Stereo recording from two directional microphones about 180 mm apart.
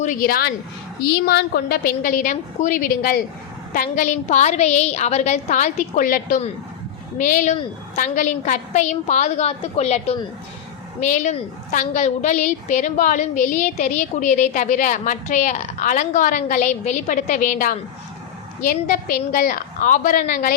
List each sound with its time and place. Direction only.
0.0 s a woman's voice: 50° left (ahead or behind)